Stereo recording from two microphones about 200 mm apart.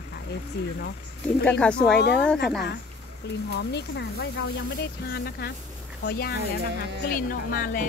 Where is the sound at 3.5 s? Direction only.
60° left (ahead or behind).